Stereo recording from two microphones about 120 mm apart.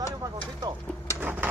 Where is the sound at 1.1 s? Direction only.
15° right (ahead or behind).